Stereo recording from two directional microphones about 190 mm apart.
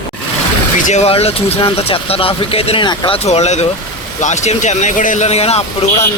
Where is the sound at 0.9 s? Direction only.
35° left (ahead or behind).